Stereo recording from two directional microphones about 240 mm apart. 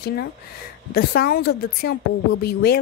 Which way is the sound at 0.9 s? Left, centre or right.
Left.